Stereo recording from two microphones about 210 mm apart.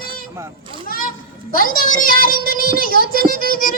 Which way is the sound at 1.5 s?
40° left (ahead or behind).